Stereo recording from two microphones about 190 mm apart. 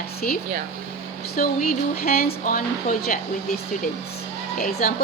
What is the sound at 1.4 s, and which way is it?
Speech, 50° left (ahead or behind).